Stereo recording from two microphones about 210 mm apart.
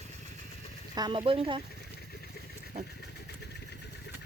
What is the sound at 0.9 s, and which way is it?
Speech, 20° right (ahead or behind).